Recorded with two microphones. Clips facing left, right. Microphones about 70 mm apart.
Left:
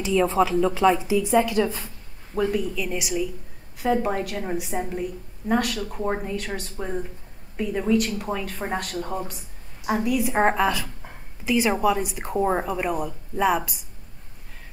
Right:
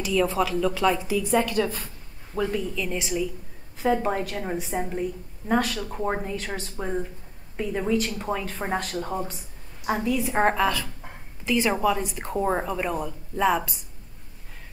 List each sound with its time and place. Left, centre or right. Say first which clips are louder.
0.0 s a woman's voice: left 3 dB; left; by 9.3 s centre
9.8 s speech: left 2 dB; centre